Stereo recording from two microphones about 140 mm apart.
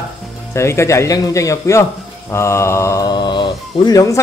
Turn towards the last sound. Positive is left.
turn(degrees=25)  # may be behind; listen again after turning